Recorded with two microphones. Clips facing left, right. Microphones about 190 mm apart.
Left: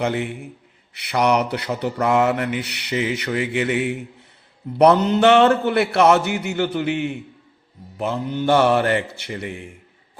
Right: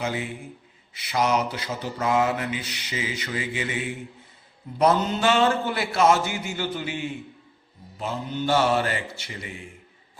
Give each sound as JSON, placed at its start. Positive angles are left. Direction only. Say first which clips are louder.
{"t": 0.0, "sound": "mantra", "louder": "left 6 dB", "side_deg": 65}